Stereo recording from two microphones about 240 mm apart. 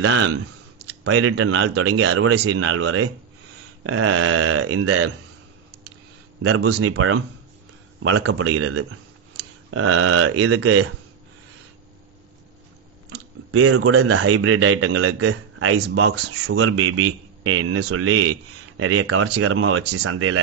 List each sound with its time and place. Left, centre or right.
0.0 s a man's voice: right
6.4 s a man's voice: right
13.1 s a man's voice: right